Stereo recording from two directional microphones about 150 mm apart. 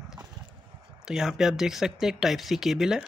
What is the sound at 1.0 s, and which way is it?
Speech, 5° right (ahead or behind).